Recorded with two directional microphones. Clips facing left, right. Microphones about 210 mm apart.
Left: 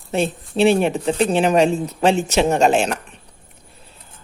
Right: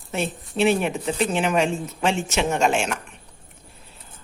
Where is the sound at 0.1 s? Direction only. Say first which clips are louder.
Left 6 dB; 30° left (ahead or behind).